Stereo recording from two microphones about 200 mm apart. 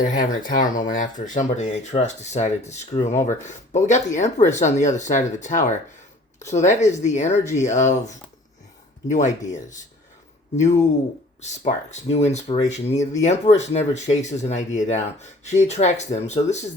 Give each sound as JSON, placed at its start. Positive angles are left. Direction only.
{"t": 0.0, "sound": "speech", "side_deg": 40}
{"t": 11.3, "sound": "speech", "side_deg": 35}